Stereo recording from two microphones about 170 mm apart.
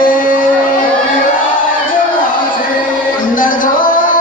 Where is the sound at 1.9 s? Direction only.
55° left (ahead or behind).